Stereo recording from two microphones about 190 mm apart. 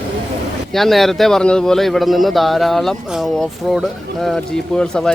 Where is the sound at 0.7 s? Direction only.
Centre (ahead or behind).